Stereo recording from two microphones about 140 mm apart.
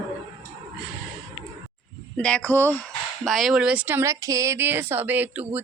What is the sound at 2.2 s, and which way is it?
Speech, 5° left (ahead or behind).